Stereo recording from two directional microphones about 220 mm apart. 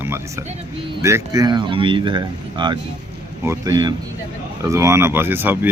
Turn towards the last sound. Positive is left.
turn(degrees=-10)  # may be behind; listen again after turning